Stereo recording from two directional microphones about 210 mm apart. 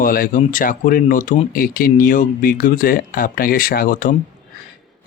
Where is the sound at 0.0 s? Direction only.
45° left (ahead or behind).